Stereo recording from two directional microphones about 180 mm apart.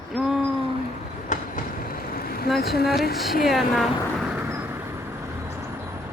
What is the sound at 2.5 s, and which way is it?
Speech, 60° left (ahead or behind).